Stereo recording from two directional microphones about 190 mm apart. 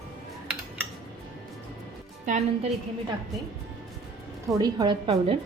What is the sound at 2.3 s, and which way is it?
Speech, 40° right (ahead or behind).